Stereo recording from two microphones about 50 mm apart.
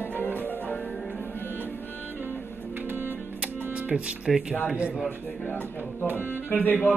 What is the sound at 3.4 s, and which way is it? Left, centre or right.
Music, right.